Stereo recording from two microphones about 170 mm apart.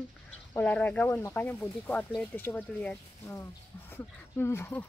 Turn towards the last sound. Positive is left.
turn(degrees=15)  # may be behind; listen again after turning